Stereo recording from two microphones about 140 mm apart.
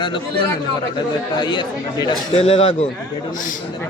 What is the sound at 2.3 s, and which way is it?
Speech, 45° left (ahead or behind).